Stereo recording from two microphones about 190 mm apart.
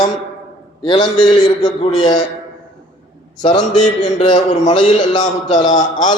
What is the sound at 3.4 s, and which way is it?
Speech, 25° left (ahead or behind).